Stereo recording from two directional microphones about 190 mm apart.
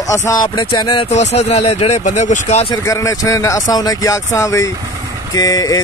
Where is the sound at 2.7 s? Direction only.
15° left (ahead or behind).